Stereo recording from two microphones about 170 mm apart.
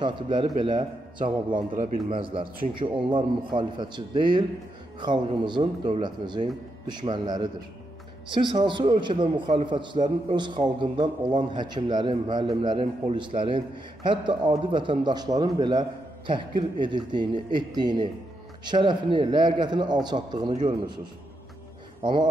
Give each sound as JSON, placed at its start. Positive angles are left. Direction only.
{"t": 0.0, "sound": "a man's voice", "side_deg": -25}
{"t": 1.5, "sound": "speech", "side_deg": -50}
{"t": 2.0, "sound": "a man's voice", "side_deg": -30}